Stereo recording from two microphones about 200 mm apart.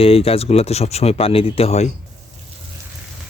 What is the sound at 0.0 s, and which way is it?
Speech, 30° left (ahead or behind).